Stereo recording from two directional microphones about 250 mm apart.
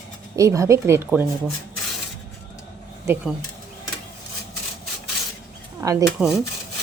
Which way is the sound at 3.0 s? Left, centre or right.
Centre.